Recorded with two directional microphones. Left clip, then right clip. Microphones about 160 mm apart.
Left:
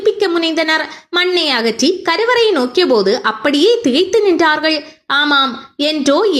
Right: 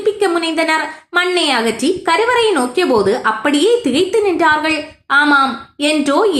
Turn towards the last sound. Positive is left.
turn(degrees=35)  # may be behind; listen again after turning